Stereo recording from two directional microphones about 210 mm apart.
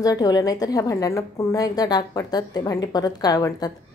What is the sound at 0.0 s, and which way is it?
A woman's voice, 15° left (ahead or behind).